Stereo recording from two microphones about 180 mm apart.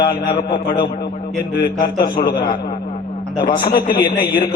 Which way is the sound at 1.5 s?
55° left (ahead or behind).